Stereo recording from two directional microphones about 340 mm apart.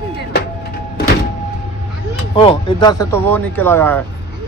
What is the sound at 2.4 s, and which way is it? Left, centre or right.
A man's voice, centre.